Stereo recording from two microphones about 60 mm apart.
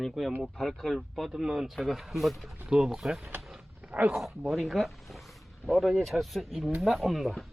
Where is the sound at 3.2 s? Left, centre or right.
Right.